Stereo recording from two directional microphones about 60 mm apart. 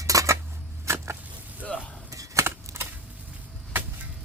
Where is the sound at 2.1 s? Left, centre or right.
Right.